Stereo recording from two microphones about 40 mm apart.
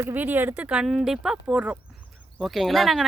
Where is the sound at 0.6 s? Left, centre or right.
Right.